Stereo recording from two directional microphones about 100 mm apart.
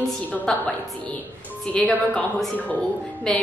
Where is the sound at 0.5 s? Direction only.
5° left (ahead or behind).